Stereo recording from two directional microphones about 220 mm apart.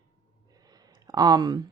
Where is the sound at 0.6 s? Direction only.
15° right (ahead or behind).